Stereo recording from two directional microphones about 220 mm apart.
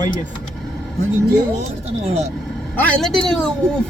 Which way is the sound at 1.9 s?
30° right (ahead or behind).